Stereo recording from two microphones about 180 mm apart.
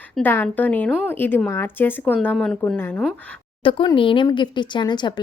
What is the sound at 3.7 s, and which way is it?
Speech, 30° left (ahead or behind).